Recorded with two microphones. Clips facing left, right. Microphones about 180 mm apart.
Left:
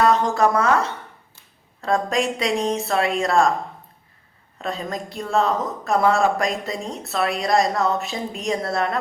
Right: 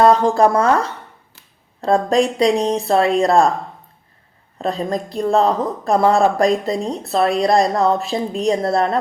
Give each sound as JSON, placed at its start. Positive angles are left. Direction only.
{"t": 0.0, "sound": "speech", "side_deg": -30}
{"t": 4.5, "sound": "speech", "side_deg": -35}